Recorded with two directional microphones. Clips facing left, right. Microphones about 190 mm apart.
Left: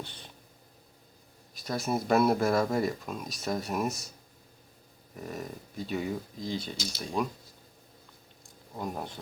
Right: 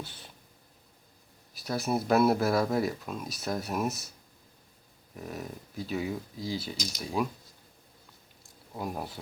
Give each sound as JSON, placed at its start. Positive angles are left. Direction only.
{"t": 0.0, "sound": "speech", "side_deg": -5}
{"t": 1.5, "sound": "speech", "side_deg": -5}
{"t": 5.1, "sound": "speech", "side_deg": 0}
{"t": 8.4, "sound": "a sound", "side_deg": -5}